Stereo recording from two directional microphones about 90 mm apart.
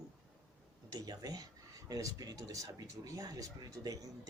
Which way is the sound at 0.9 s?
45° right (ahead or behind).